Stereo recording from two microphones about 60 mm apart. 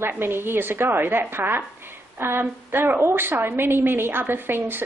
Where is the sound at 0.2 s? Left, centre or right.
Right.